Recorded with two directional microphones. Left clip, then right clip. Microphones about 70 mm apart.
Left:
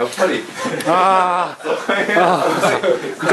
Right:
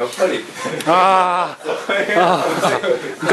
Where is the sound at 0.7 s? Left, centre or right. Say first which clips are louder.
Right 1 dB; right.